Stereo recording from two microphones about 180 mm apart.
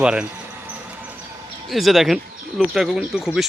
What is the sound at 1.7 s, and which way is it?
Speech, centre (ahead or behind).